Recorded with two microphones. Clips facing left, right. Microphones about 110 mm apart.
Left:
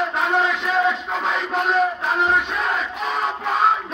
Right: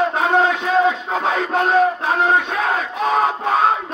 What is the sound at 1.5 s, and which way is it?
Battle cry, 50° right (ahead or behind).